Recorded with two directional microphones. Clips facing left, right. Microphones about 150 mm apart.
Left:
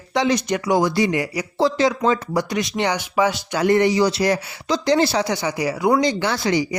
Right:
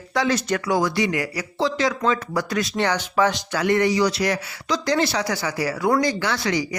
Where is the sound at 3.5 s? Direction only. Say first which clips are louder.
Left 4 dB; 30° left (ahead or behind).